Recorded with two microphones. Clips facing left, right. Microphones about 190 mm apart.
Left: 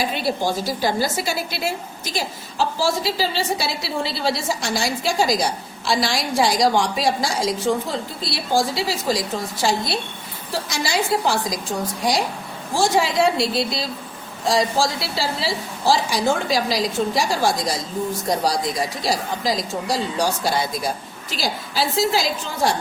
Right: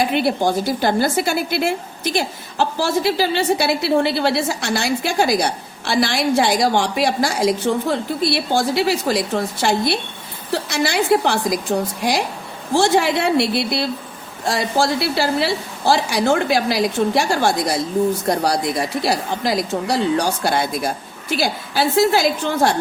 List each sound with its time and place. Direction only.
0.0 s speech: 60° right (ahead or behind)